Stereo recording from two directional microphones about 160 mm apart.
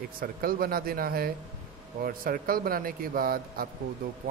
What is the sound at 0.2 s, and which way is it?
Speech, 65° right (ahead or behind).